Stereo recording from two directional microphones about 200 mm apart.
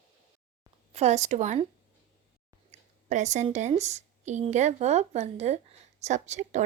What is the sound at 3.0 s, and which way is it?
A woman's voice, 35° right (ahead or behind).